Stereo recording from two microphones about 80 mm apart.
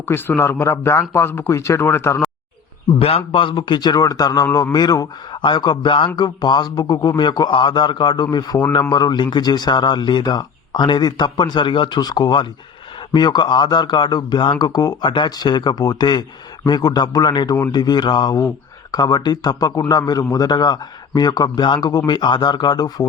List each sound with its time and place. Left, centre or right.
0.0 s a man's voice: left
3.3 s a man's voice: left
5.4 s speech: left
6.1 s a man's voice: left
15.0 s a man's voice: left
18.3 s a man's voice: left